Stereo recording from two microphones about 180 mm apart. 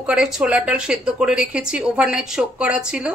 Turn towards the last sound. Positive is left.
turn(degrees=-5)  # may be behind; listen again after turning